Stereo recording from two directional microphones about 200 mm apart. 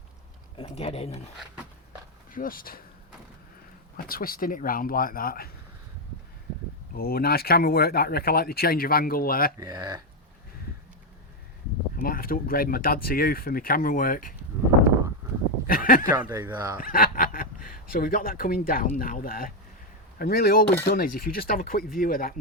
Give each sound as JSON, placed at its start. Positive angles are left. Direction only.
{"t": 0.5, "sound": "speech", "side_deg": 30}
{"t": 2.3, "sound": "speech", "side_deg": 45}
{"t": 3.9, "sound": "speech", "side_deg": 45}
{"t": 6.9, "sound": "speech", "side_deg": 50}
{"t": 9.6, "sound": "speech", "side_deg": -20}
{"t": 11.9, "sound": "speech", "side_deg": 45}
{"t": 15.6, "sound": "speech", "side_deg": 45}
{"t": 16.1, "sound": "speech", "side_deg": -15}
{"t": 16.8, "sound": "speech", "side_deg": 45}